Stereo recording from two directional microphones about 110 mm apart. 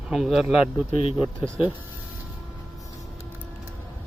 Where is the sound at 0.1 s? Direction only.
Centre (ahead or behind).